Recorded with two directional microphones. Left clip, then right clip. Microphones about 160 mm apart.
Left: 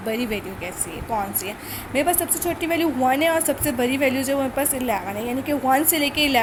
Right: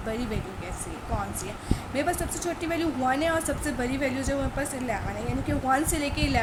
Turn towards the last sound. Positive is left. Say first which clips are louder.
# left 8 dB
turn(degrees=35)  # may be behind; listen again after turning